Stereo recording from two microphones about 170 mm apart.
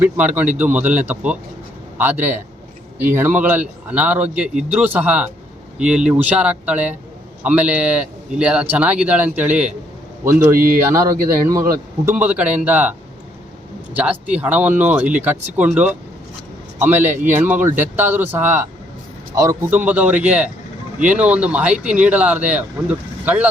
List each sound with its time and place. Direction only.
0.0 s speech: 10° right (ahead or behind)
10.5 s speech: 55° right (ahead or behind)
11.3 s speech: 20° right (ahead or behind)
13.9 s a man's voice: 10° right (ahead or behind)